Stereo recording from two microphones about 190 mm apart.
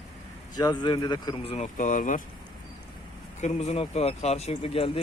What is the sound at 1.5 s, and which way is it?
Speech, 40° left (ahead or behind).